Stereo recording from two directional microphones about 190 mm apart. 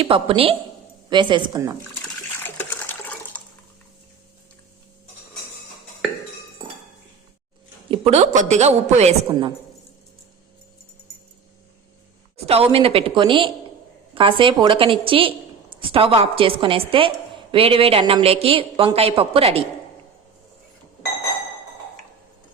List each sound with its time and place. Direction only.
0.0 s a woman's voice: 30° right (ahead or behind)
2.4 s water: 10° left (ahead or behind)
7.9 s a woman's voice: 35° right (ahead or behind)
12.5 s a woman's voice: 30° right (ahead or behind)